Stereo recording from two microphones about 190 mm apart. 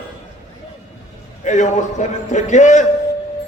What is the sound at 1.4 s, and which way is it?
A man's voice, 40° left (ahead or behind).